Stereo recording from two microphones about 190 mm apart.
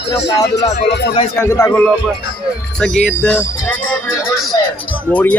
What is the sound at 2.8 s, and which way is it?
Speech, 5° left (ahead or behind).